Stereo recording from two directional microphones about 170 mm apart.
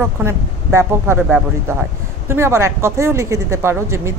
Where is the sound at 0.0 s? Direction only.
15° right (ahead or behind).